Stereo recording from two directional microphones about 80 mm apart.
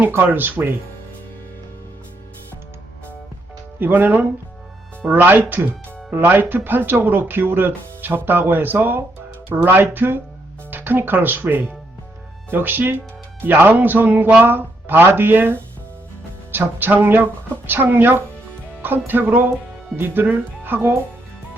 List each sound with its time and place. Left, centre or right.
0.0 s speech: right
3.8 s speech: right